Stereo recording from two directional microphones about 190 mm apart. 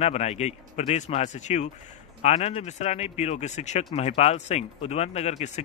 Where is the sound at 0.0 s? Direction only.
35° left (ahead or behind).